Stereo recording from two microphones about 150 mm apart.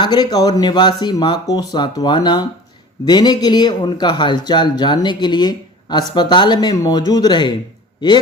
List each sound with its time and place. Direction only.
0.0 s a man's voice: 30° left (ahead or behind)